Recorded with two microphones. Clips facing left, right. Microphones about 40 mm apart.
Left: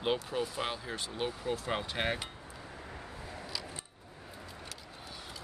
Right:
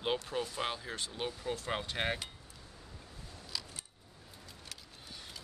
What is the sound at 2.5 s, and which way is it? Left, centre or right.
Vehicle, left.